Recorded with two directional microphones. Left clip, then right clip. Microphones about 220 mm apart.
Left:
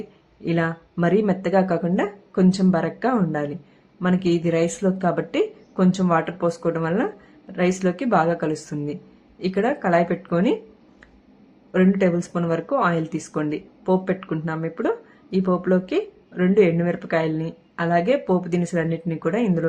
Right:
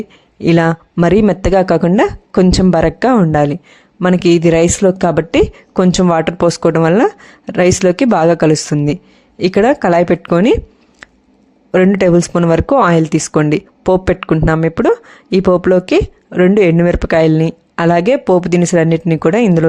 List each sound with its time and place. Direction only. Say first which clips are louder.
0.4 s speech: right 12 dB; 45° right (ahead or behind)
11.7 s speech: right 10 dB; 45° right (ahead or behind)